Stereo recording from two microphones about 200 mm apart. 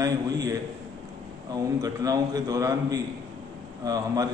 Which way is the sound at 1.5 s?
20° right (ahead or behind).